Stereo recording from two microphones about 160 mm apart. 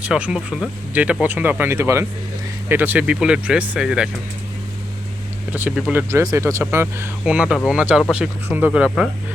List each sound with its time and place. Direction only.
0.0 s speech: 5° right (ahead or behind)
5.5 s speech: 10° right (ahead or behind)